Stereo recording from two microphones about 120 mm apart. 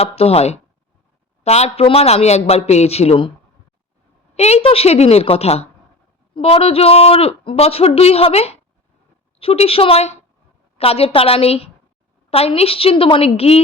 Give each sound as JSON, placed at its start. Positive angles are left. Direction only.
{"t": 0.0, "sound": "a man's voice", "side_deg": 55}
{"t": 4.4, "sound": "a man's voice", "side_deg": 60}